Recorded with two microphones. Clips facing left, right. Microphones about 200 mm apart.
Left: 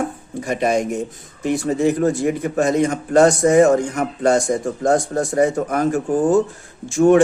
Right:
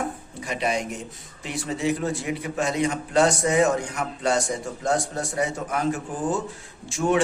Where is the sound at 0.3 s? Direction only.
45° left (ahead or behind).